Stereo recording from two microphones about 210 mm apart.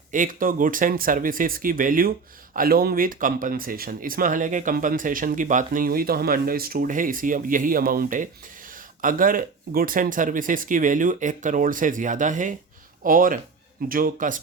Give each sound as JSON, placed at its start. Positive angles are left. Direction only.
{"t": 0.1, "sound": "speech", "side_deg": -40}